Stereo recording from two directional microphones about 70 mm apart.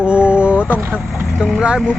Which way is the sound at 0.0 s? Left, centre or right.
Centre.